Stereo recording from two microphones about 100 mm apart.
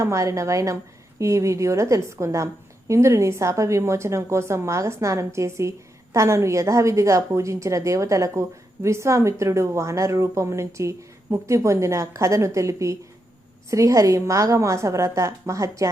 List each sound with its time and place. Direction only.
0.0 s a woman's voice: 30° right (ahead or behind)